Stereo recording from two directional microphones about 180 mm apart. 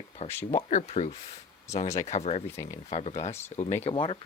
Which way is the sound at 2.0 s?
40° left (ahead or behind).